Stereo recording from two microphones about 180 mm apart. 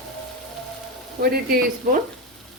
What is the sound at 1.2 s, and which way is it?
Speech, 55° right (ahead or behind).